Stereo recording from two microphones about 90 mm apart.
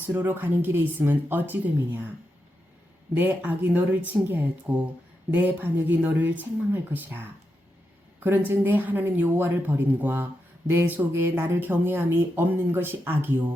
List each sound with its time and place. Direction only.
0.2 s speech: 20° right (ahead or behind)
3.2 s speech: 20° right (ahead or behind)